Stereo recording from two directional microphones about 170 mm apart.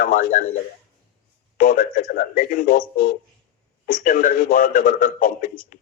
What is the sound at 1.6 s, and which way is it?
A man's voice, 55° left (ahead or behind).